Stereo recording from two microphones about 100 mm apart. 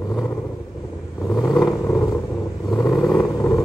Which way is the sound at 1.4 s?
5° right (ahead or behind).